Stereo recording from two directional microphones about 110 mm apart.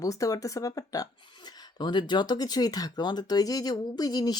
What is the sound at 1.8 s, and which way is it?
Speech, 45° left (ahead or behind).